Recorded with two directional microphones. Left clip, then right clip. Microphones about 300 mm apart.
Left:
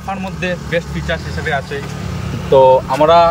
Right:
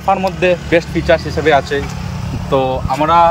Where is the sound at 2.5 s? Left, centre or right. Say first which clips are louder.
Left 6 dB; centre.